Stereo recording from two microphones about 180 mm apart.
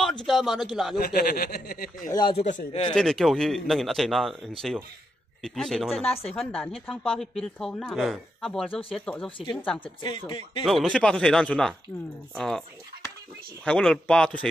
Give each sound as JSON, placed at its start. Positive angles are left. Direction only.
{"t": 0.3, "sound": "speech", "side_deg": 0}
{"t": 0.9, "sound": "speech", "side_deg": 55}
{"t": 2.0, "sound": "speech", "side_deg": 20}
{"t": 2.3, "sound": "a man's voice", "side_deg": 40}
{"t": 2.9, "sound": "speech", "side_deg": 0}
{"t": 6.0, "sound": "a man's voice", "side_deg": 35}
{"t": 6.3, "sound": "speech", "side_deg": 5}
{"t": 10.0, "sound": "speech", "side_deg": 30}
{"t": 10.6, "sound": "speech", "side_deg": 0}
{"t": 13.7, "sound": "speech", "side_deg": 5}